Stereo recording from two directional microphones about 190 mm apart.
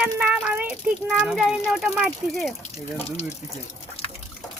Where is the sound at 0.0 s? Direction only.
5° right (ahead or behind).